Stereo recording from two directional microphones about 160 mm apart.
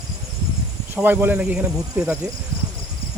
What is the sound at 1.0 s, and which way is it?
Speech, 10° right (ahead or behind).